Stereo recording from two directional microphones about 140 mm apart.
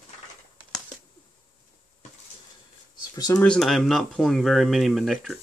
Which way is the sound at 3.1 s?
25° left (ahead or behind).